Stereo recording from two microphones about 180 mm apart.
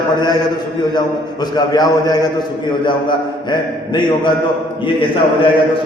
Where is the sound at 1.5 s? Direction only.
20° left (ahead or behind).